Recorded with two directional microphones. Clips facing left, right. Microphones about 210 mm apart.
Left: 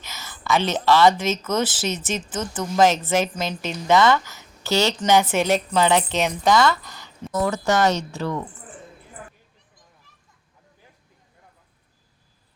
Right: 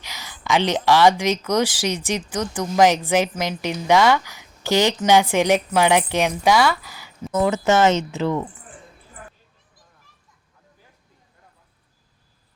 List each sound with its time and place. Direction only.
0.0 s a sound: 15° right (ahead or behind)
0.9 s speech: 15° right (ahead or behind)
7.3 s speech: 20° right (ahead or behind)